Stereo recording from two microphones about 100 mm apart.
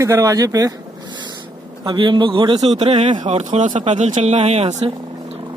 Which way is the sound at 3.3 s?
90° right.